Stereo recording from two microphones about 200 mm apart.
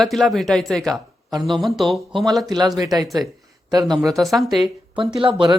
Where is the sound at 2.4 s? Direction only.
20° right (ahead or behind).